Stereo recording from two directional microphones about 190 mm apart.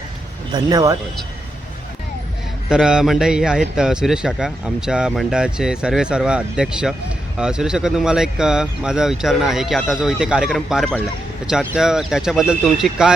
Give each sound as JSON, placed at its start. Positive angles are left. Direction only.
{"t": 0.5, "sound": "speech", "side_deg": -20}
{"t": 2.6, "sound": "a man's voice", "side_deg": -5}